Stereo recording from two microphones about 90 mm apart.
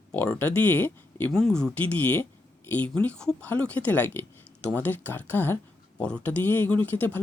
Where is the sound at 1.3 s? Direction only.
5° left (ahead or behind).